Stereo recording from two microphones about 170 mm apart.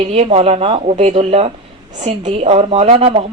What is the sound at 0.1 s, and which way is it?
Speech, 35° right (ahead or behind).